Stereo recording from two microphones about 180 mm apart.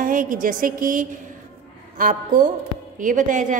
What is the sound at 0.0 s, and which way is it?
A woman's voice, 50° right (ahead or behind).